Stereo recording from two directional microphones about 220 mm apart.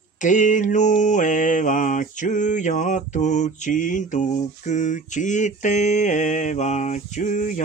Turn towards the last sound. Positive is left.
turn(degrees=35)  # may be behind; listen again after turning